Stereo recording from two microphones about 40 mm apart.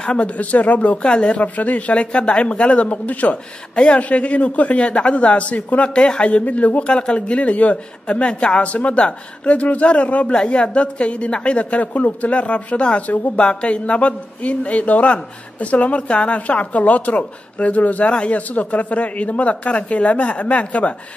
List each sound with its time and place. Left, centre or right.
0.0 s speech: left
0.4 s a woman's voice: left
1.0 s speech: left
1.4 s a woman's voice: left
3.7 s a woman's voice: left
6.4 s a woman's voice: left
6.9 s a woman's voice: left
13.4 s a woman's voice: left